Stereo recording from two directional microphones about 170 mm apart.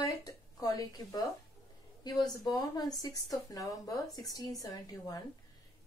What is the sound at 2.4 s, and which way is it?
A woman's voice, 20° left (ahead or behind).